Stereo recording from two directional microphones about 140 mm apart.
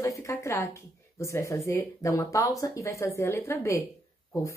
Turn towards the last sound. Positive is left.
turn(degrees=20)  # may be behind; listen again after turning